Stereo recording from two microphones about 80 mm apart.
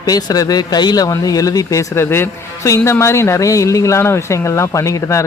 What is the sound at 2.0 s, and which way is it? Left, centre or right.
Speech, left.